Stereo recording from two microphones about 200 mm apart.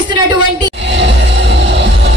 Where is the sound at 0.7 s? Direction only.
60° right (ahead or behind).